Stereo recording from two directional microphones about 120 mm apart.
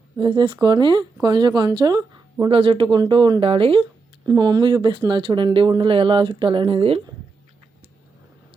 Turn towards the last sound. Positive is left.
turn(degrees=-50)  # may be behind; listen again after turning